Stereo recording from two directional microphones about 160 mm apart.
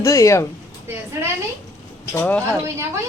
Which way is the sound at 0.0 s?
20° left (ahead or behind).